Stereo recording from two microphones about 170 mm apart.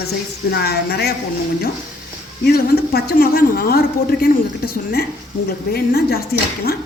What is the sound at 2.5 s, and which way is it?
A woman's voice, 65° left (ahead or behind).